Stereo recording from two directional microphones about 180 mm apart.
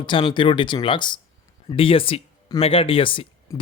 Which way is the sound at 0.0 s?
30° left (ahead or behind).